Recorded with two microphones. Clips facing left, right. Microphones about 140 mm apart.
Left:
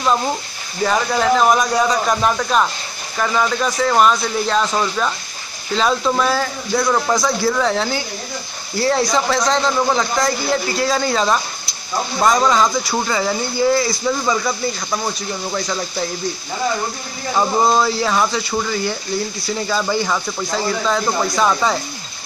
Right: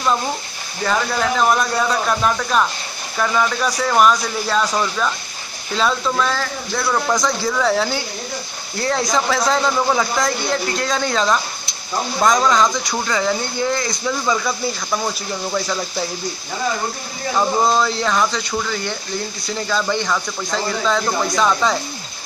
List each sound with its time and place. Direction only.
0.8 s speech: 10° left (ahead or behind)
4.6 s speech: 10° left (ahead or behind)
17.4 s speech: 5° left (ahead or behind)